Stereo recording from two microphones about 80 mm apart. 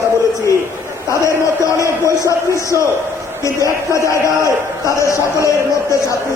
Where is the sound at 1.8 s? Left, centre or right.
Left.